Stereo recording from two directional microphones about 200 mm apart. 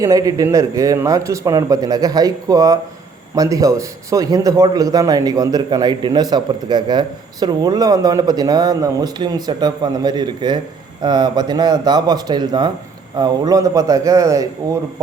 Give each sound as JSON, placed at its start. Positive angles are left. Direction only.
{"t": 0.0, "sound": "a man's voice", "side_deg": -15}